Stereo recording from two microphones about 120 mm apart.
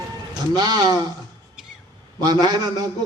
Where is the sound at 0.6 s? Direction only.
35° right (ahead or behind).